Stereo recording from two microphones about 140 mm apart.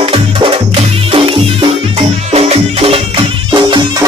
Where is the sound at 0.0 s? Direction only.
40° right (ahead or behind).